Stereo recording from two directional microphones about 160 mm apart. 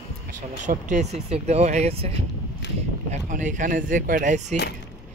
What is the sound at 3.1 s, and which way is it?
Speech, 50° right (ahead or behind).